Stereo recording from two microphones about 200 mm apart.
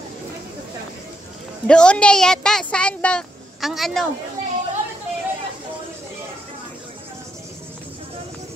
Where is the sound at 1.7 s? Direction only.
5° left (ahead or behind).